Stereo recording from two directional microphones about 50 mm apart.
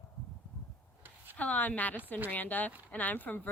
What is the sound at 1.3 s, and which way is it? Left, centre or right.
Speech, left.